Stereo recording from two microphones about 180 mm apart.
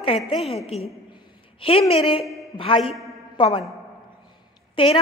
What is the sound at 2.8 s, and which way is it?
Speech, centre (ahead or behind).